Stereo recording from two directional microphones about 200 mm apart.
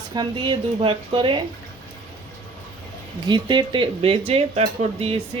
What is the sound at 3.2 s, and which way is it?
Speech, 20° right (ahead or behind).